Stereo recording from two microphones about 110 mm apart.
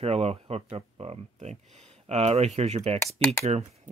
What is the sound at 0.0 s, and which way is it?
Speech, 65° right (ahead or behind).